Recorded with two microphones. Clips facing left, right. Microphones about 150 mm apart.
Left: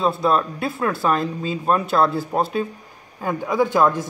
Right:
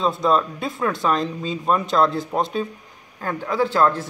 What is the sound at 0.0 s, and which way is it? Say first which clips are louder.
Speech: even; 5° left (ahead or behind).